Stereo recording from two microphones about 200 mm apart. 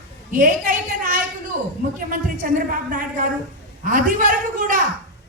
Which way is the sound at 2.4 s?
45° right (ahead or behind).